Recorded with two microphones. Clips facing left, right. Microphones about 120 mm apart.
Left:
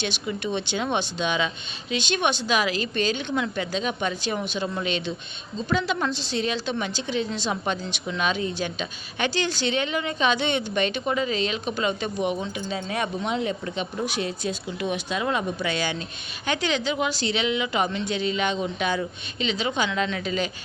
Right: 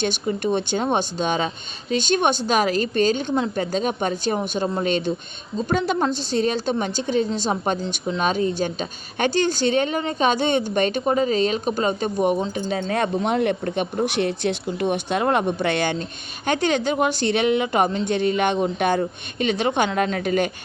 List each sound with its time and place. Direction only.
0.0 s a woman's voice: 45° right (ahead or behind)